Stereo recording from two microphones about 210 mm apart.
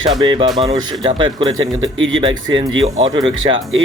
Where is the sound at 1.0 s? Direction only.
25° right (ahead or behind).